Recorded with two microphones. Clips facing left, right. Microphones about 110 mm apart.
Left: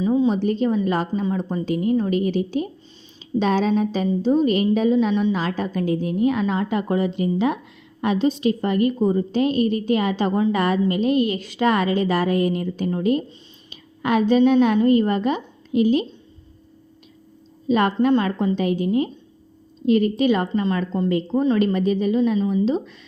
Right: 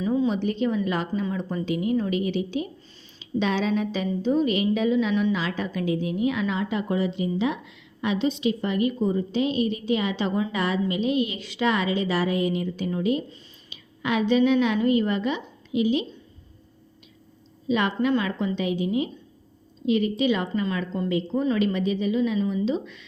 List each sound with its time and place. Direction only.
0.0 s a sound: 25° left (ahead or behind)
0.3 s a woman's voice: 40° left (ahead or behind)
17.7 s a woman's voice: 45° left (ahead or behind)